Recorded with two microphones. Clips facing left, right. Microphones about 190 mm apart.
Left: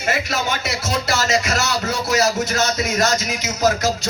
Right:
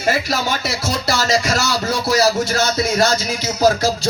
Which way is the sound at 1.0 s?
35° right (ahead or behind).